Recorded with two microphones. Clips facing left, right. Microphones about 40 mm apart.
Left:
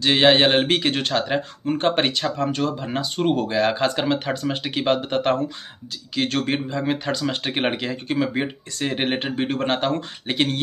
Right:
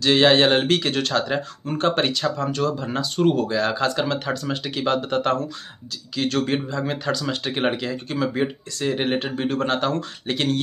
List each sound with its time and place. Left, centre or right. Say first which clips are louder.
0.0 s speech: even; left